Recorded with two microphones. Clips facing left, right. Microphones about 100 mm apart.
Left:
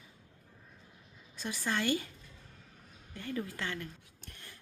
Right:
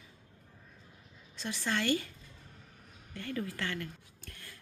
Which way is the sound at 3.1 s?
20° left (ahead or behind).